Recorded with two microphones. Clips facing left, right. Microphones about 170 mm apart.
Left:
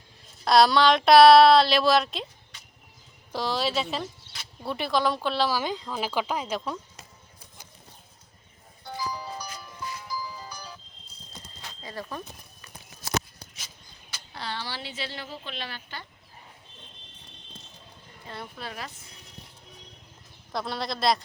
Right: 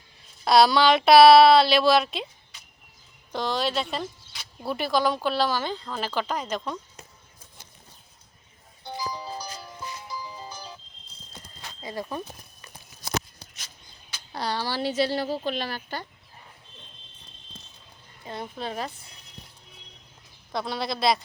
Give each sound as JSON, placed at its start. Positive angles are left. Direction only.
{"t": 0.4, "sound": "speech", "side_deg": 0}
{"t": 8.8, "sound": "music", "side_deg": -20}
{"t": 11.8, "sound": "speech", "side_deg": -15}
{"t": 14.3, "sound": "speech", "side_deg": -40}
{"t": 18.5, "sound": "speech", "side_deg": -30}
{"t": 20.5, "sound": "speech", "side_deg": 0}